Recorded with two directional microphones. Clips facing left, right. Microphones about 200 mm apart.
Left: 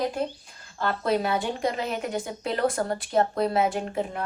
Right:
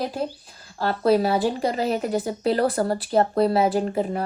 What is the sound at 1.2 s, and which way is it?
A woman's voice, 35° right (ahead or behind).